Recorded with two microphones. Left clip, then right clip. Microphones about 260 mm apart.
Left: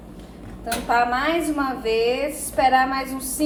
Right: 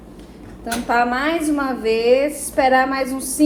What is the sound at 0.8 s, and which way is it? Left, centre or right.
A woman's voice, centre.